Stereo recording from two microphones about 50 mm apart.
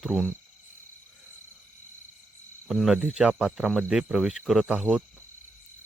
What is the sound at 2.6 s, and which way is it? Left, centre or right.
Speech, centre.